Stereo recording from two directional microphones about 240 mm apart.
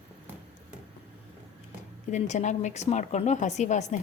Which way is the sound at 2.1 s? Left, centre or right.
Left.